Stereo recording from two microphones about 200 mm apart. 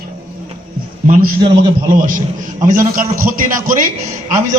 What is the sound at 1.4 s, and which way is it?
Speech, 25° right (ahead or behind).